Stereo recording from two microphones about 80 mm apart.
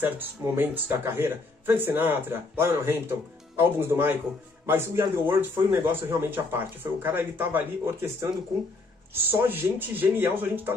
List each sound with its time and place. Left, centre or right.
0.2 s a man's voice: right